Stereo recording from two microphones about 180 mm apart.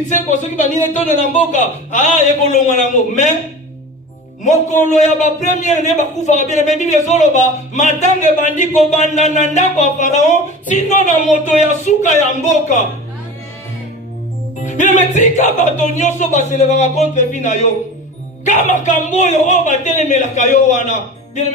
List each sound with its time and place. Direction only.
0.1 s a man's voice: 40° left (ahead or behind)
4.5 s a man's voice: 40° left (ahead or behind)
14.6 s music: 40° left (ahead or behind)
15.1 s a man's voice: 40° left (ahead or behind)